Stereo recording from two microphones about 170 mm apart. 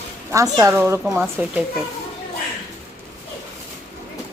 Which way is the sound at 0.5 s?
15° right (ahead or behind).